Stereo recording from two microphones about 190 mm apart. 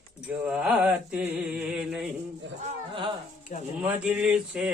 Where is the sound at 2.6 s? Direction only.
30° right (ahead or behind).